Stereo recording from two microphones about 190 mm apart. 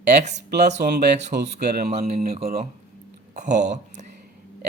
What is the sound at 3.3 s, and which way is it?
Speech, 40° right (ahead or behind).